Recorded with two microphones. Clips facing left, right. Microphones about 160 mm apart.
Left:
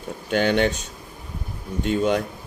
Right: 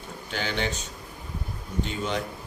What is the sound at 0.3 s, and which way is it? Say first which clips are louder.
Speech: left 10 dB; 55° left (ahead or behind).